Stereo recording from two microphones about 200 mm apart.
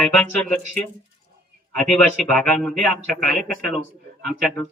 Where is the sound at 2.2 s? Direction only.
5° left (ahead or behind).